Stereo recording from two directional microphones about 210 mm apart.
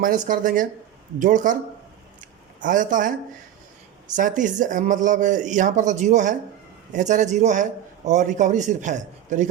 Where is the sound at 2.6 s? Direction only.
40° right (ahead or behind).